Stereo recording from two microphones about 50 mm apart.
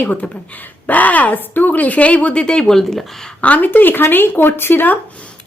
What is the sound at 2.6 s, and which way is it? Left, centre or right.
Speech, centre.